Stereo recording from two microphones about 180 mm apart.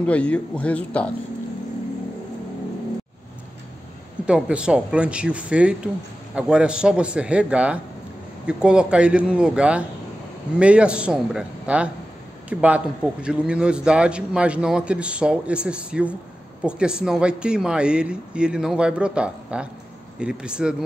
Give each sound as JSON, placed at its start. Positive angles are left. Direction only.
{"t": 0.0, "sound": "speech", "side_deg": 5}
{"t": 4.3, "sound": "a man's voice", "side_deg": -5}